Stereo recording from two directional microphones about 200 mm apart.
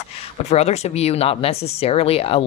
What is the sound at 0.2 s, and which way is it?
Speech, 30° left (ahead or behind).